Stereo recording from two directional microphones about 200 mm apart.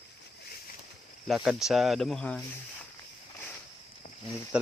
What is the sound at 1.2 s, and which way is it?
Speech, centre (ahead or behind).